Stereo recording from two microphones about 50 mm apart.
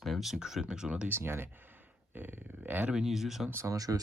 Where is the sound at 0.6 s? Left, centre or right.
Centre.